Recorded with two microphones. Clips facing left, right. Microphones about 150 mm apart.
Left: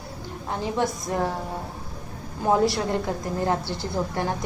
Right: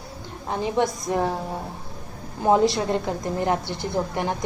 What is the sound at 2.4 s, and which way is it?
A woman's voice, 20° right (ahead or behind).